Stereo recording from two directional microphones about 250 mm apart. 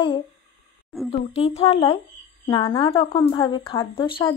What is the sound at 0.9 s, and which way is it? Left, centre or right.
Speech, centre.